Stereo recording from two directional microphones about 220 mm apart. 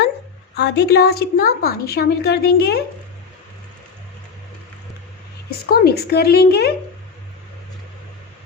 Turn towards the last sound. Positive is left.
turn(degrees=45)  # may be behind; listen again after turning